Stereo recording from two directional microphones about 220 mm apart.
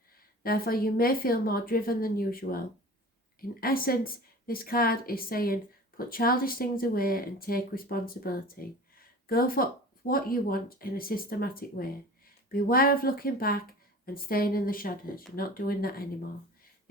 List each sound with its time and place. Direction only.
0.4 s speech: 45° left (ahead or behind)
3.6 s a woman's voice: 40° left (ahead or behind)